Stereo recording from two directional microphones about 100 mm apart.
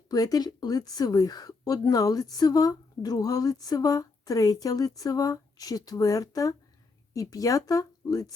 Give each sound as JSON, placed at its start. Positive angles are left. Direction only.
{"t": 0.1, "sound": "a woman's voice", "side_deg": 40}